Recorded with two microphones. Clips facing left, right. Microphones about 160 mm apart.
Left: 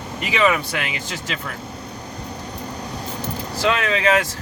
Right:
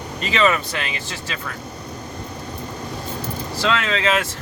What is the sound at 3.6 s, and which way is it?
Speech, 15° left (ahead or behind).